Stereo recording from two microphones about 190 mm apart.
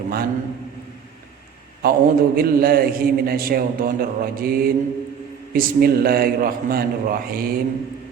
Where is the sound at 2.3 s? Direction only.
50° right (ahead or behind).